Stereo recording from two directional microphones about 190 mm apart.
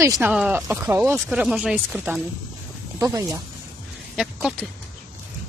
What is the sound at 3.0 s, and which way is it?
Speech, 15° right (ahead or behind).